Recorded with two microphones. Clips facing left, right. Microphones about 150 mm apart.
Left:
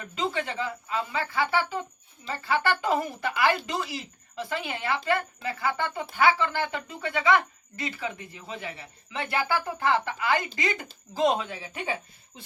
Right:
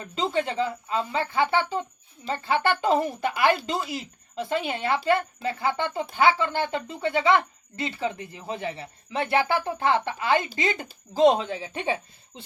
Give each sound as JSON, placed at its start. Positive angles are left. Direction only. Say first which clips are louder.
{"t": 0.0, "sound": "speech", "louder": "right 4 dB", "side_deg": -25}